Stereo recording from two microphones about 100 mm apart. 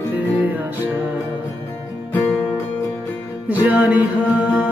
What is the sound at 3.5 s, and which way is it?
Music, 15° right (ahead or behind).